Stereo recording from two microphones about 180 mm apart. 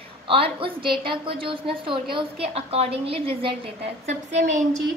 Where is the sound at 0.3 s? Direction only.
30° right (ahead or behind).